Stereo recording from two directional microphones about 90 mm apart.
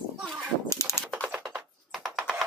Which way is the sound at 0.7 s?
30° left (ahead or behind).